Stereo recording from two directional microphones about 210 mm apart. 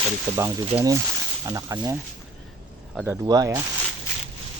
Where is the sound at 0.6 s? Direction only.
25° right (ahead or behind).